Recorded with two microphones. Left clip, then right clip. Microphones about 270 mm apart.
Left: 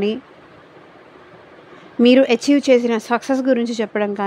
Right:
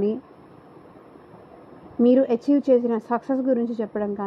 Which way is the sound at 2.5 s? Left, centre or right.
Left.